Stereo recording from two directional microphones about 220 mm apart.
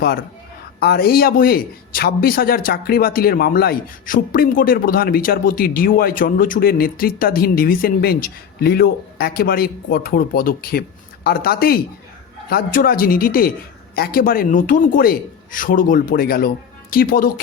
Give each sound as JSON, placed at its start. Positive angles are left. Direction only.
{"t": 0.8, "sound": "a man's voice", "side_deg": 45}